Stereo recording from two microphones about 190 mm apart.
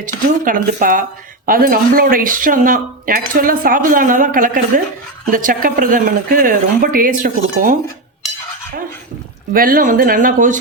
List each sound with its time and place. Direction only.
0.4 s speech: 45° right (ahead or behind)
9.5 s speech: 50° right (ahead or behind)